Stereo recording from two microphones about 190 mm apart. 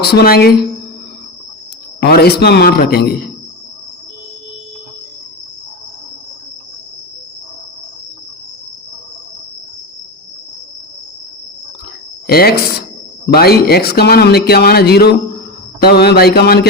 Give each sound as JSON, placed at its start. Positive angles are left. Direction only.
{"t": 0.0, "sound": "speech", "side_deg": 60}
{"t": 2.0, "sound": "speech", "side_deg": 55}
{"t": 12.3, "sound": "speech", "side_deg": 55}